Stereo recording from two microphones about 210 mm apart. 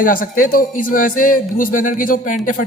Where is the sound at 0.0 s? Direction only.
40° left (ahead or behind).